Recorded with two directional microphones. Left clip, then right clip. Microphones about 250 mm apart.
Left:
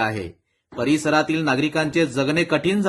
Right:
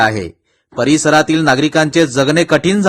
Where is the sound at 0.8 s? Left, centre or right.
Right.